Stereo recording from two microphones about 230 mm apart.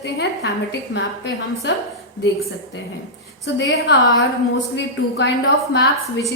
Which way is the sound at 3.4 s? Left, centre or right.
Left.